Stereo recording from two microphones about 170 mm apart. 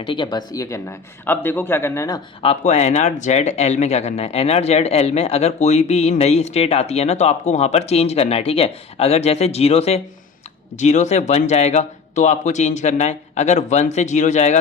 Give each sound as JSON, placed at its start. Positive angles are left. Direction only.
{"t": 0.0, "sound": "speech", "side_deg": 30}
{"t": 2.4, "sound": "speech", "side_deg": 40}